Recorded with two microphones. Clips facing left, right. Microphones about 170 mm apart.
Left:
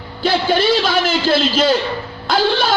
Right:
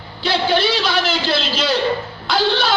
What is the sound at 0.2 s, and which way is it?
A man's voice, 50° left (ahead or behind).